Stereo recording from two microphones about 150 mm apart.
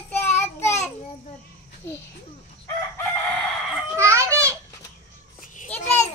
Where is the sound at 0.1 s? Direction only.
15° left (ahead or behind).